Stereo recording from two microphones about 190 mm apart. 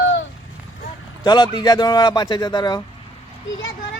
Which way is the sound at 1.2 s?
20° left (ahead or behind).